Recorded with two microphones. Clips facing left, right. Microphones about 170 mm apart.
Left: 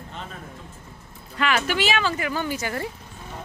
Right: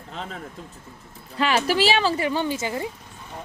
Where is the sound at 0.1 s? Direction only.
90° right.